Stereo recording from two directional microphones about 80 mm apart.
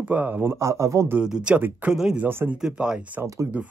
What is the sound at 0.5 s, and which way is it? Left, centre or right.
Speech, right.